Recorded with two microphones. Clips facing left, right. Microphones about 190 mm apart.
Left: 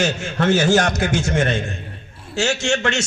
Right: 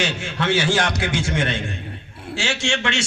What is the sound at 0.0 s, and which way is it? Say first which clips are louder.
A man's voice: left 4 dB; 45° left (ahead or behind).